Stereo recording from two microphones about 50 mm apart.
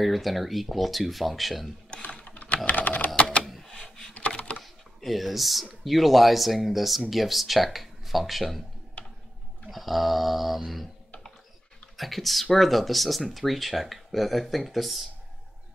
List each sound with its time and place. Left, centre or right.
0.0 s speech: centre
1.9 s typing: left
3.2 s typewriter: left
3.4 s a sound: centre
3.7 s a sound: centre
5.0 s speech: centre
9.7 s speech: centre
12.0 s speech: centre